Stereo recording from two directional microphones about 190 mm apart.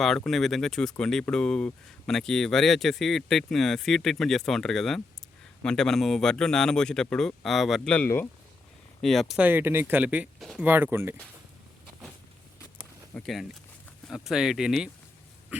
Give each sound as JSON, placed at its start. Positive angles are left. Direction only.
{"t": 0.3, "sound": "speech", "side_deg": 0}
{"t": 13.1, "sound": "speech", "side_deg": 0}